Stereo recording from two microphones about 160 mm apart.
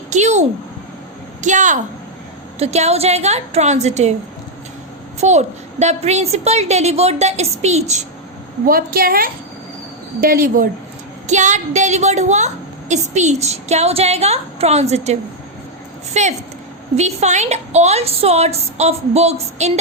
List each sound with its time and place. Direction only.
0.1 s a woman's voice: 45° right (ahead or behind)
5.2 s a woman's voice: 45° right (ahead or behind)
8.6 s a woman's voice: 65° right (ahead or behind)
11.3 s a woman's voice: 50° right (ahead or behind)